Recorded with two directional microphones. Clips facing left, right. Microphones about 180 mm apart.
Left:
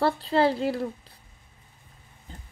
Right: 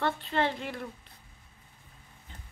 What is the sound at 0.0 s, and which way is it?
A woman's voice, 35° left (ahead or behind).